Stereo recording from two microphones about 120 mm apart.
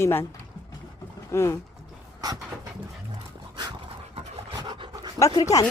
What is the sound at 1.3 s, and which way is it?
Speech, 20° left (ahead or behind).